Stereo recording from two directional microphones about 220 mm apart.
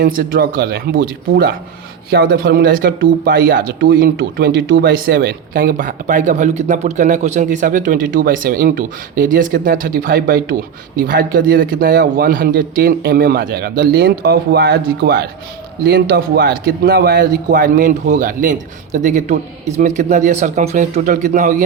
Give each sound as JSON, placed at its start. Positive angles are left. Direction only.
{"t": 0.0, "sound": "speech", "side_deg": -40}